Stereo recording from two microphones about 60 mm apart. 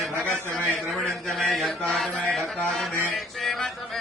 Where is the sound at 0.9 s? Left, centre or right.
Centre.